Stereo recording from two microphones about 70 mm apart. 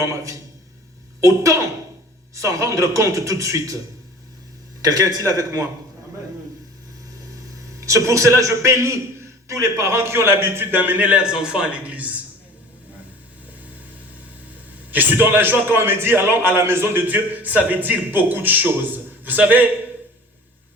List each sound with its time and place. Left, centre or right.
0.0 s a man's voice: right
4.8 s a man's voice: right
7.5 s a man's voice: right
14.8 s a man's voice: right